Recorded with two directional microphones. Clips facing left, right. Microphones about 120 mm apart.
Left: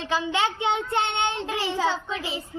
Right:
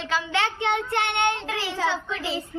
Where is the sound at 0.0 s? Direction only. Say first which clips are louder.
Left 1 dB; 20° left (ahead or behind).